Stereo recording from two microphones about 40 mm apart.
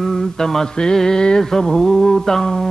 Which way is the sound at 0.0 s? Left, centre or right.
Centre.